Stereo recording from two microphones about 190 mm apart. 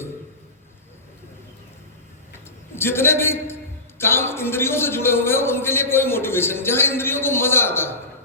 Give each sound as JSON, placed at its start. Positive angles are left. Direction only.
{"t": 2.3, "sound": "a man's voice", "side_deg": 10}